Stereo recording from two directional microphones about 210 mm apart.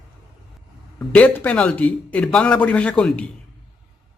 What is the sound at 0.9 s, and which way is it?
Speech, 5° left (ahead or behind).